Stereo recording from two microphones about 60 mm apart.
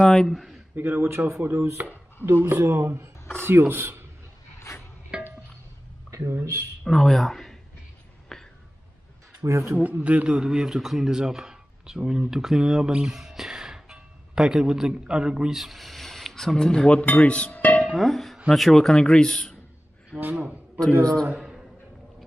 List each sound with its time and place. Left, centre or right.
0.0 s a sound: centre
0.3 s speech: centre
0.7 s speech: right
4.7 s a sound: left
5.1 s music: centre
6.0 s a sound: right
6.9 s speech: centre
8.3 s a sound: centre
9.5 s speech: right
9.8 s a man's voice: right; by 17.0 s centre
17.0 s speech: left
17.8 s speech: centre
20.1 s speech: left
21.0 s speech: centre